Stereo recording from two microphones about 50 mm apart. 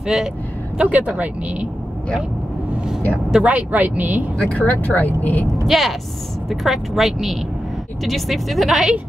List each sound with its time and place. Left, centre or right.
0.0 s speech: centre
0.7 s speech: right
3.4 s speech: right
4.4 s speech: left
5.7 s a woman's voice: centre